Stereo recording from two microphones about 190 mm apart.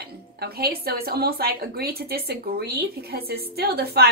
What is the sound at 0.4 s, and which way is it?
A woman's voice, 55° right (ahead or behind).